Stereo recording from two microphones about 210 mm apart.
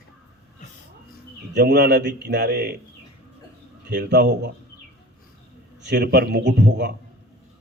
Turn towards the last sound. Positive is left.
turn(degrees=-55)  # may be behind; listen again after turning